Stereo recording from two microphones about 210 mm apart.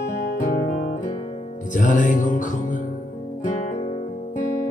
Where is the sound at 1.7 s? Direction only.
35° left (ahead or behind).